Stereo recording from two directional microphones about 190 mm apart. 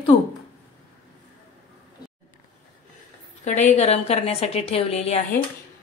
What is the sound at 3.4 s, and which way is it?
A woman's voice, 40° left (ahead or behind).